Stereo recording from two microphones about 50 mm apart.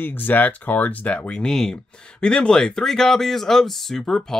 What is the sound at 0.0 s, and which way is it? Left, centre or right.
Speech, left.